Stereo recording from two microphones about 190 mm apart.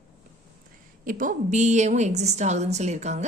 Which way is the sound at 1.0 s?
45° right (ahead or behind).